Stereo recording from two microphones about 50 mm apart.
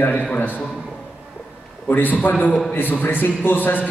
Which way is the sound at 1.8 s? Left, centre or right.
Left.